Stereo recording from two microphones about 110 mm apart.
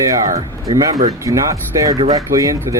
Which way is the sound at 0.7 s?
35° right (ahead or behind).